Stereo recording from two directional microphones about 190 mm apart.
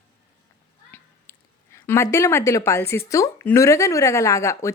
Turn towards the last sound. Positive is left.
turn(degrees=15)  # may be behind; listen again after turning